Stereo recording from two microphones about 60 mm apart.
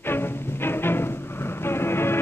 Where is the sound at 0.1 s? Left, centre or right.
Left.